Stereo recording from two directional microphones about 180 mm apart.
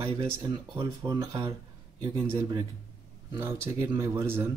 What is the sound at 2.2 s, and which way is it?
Speech, 10° right (ahead or behind).